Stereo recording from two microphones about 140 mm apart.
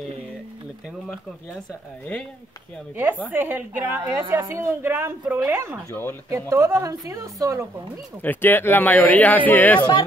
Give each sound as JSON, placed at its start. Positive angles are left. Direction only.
{"t": 3.3, "sound": "a woman's voice", "side_deg": -15}
{"t": 5.9, "sound": "speech", "side_deg": 15}
{"t": 6.3, "sound": "a woman's voice", "side_deg": -20}
{"t": 8.2, "sound": "speech", "side_deg": 15}
{"t": 9.8, "sound": "speech", "side_deg": 30}